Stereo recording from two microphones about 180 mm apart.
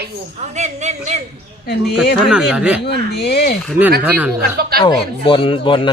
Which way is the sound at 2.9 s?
65° left (ahead or behind).